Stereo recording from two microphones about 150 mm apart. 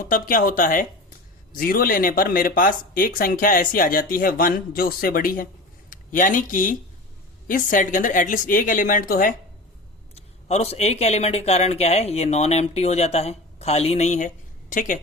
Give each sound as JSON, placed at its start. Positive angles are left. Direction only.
{"t": 0.0, "sound": "speech", "side_deg": 65}
{"t": 1.5, "sound": "speech", "side_deg": 75}
{"t": 10.2, "sound": "speech", "side_deg": 45}